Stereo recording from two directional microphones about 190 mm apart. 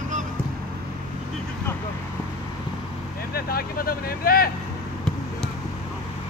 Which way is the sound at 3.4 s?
55° left (ahead or behind).